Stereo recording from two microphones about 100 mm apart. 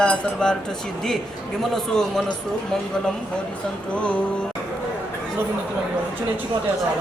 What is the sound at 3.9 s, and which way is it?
Music, 10° left (ahead or behind).